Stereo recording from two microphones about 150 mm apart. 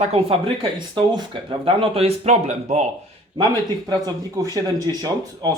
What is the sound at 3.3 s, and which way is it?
Speech, 30° right (ahead or behind).